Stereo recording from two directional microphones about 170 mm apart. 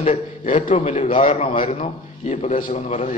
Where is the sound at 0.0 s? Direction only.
40° left (ahead or behind).